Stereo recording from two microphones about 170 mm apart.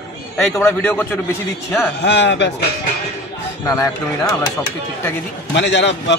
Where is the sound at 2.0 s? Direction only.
90° left.